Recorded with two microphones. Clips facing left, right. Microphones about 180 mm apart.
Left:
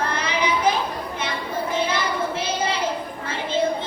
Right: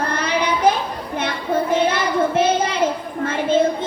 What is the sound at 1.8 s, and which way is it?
Child singing, 55° right (ahead or behind).